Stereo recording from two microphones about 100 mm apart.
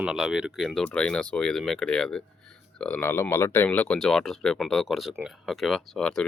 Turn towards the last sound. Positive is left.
turn(degrees=5)  # may be behind; listen again after turning